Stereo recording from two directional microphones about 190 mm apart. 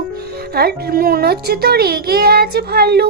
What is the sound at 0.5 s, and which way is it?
A child's voice, 55° right (ahead or behind).